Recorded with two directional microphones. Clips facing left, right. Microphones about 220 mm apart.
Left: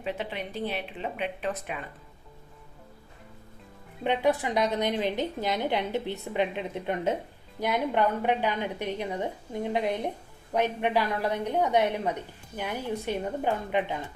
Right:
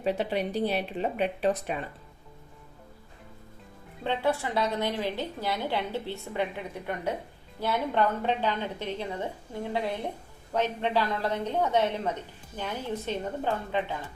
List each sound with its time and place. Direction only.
0.0 s speech: 40° right (ahead or behind)
4.0 s a woman's voice: 15° left (ahead or behind)